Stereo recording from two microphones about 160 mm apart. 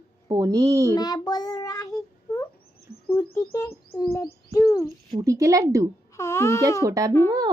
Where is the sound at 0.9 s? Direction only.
25° left (ahead or behind).